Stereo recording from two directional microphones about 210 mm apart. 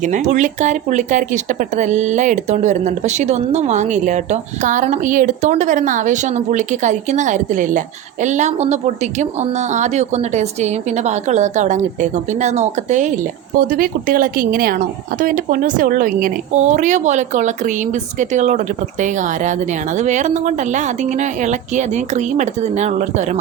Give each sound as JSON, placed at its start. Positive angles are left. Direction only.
{"t": 0.0, "sound": "speech", "side_deg": -35}